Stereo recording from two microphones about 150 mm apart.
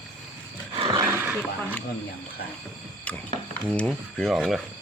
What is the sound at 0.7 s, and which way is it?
Roaring cats, 30° right (ahead or behind).